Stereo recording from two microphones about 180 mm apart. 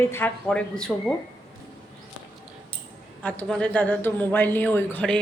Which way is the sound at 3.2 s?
5° left (ahead or behind).